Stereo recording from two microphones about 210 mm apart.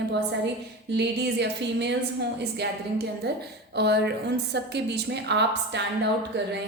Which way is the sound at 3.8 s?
55° right (ahead or behind).